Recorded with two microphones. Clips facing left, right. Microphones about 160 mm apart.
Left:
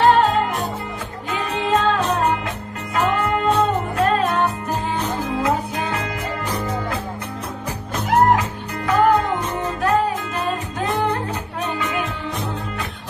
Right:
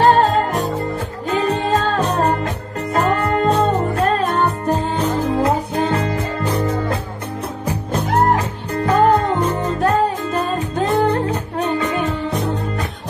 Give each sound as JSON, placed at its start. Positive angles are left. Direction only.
{"t": 0.0, "sound": "music", "side_deg": -40}